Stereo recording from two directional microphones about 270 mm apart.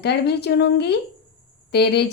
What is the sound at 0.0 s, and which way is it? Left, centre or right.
Speech, left.